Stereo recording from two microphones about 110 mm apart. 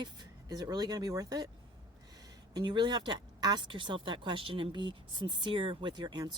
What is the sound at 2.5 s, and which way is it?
Speech, 45° right (ahead or behind).